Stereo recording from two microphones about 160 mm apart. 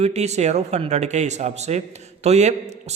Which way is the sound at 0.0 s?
45° right (ahead or behind).